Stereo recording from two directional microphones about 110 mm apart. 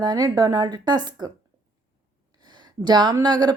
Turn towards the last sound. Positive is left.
turn(degrees=-40)  # may be behind; listen again after turning